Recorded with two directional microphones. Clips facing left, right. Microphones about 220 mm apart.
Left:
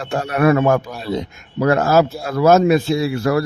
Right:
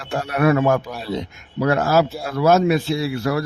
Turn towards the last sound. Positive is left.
turn(degrees=45)  # may be behind; listen again after turning